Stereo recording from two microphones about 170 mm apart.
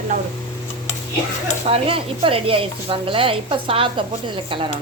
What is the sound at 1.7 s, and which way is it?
Speech, 35° right (ahead or behind).